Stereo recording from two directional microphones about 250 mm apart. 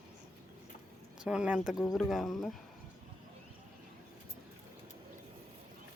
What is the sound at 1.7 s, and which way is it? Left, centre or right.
Speech, centre.